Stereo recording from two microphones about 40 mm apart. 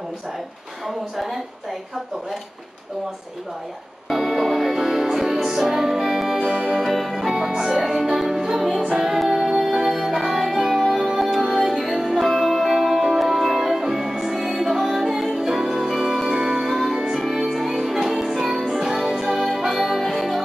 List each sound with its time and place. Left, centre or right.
0.8 s a woman's voice: centre
4.1 s music: centre
4.7 s music: centre
6.9 s music: centre
8.8 s music: centre
9.1 s music: centre
11.1 s music: centre
11.4 s music: centre
11.7 s music: centre
16.3 s music: centre
16.6 s music: centre
16.9 s music: centre